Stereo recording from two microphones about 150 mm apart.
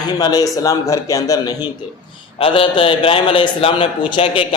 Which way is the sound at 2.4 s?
35° left (ahead or behind).